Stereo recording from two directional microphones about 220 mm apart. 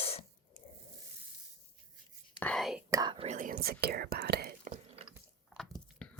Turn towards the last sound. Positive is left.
turn(degrees=5)  # may be behind; listen again after turning